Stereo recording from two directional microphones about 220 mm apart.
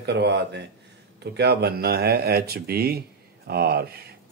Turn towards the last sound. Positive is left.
turn(degrees=-45)  # may be behind; listen again after turning